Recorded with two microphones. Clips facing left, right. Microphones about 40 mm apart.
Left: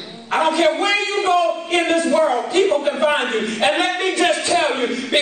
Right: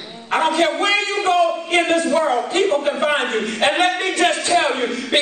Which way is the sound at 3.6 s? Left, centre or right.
Right.